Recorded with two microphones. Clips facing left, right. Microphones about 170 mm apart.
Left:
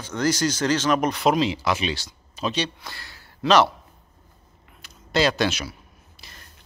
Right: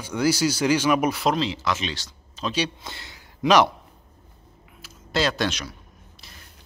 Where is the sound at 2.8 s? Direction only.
20° right (ahead or behind).